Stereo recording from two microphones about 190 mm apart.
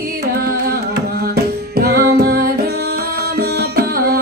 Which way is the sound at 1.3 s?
55° right (ahead or behind).